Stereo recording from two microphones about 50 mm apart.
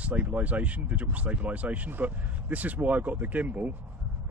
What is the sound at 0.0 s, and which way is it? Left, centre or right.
Speech, right.